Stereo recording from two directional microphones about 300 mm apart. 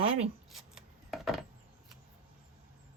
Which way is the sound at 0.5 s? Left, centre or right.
Centre.